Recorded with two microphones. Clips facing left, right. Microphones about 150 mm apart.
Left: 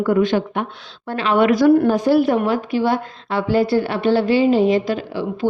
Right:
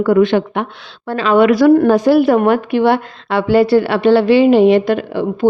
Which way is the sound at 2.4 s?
60° right (ahead or behind).